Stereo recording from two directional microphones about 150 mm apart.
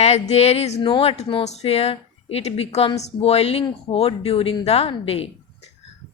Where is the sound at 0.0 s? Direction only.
45° left (ahead or behind).